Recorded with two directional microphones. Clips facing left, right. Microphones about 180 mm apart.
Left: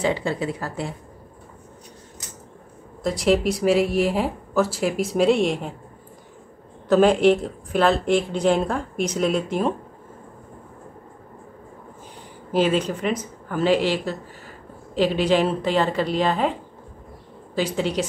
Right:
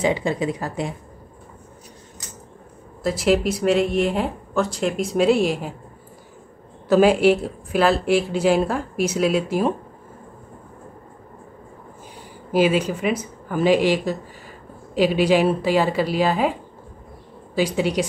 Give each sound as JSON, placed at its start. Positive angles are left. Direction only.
{"t": 0.0, "sound": "speech", "side_deg": -15}
{"t": 3.0, "sound": "speech", "side_deg": 0}
{"t": 6.9, "sound": "speech", "side_deg": -10}
{"t": 12.5, "sound": "speech", "side_deg": -10}
{"t": 17.6, "sound": "speech", "side_deg": -10}